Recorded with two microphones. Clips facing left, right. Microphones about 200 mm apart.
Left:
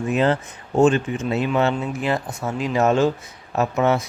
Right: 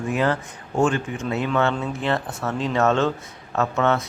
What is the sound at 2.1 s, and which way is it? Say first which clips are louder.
Speech: even; centre (ahead or behind).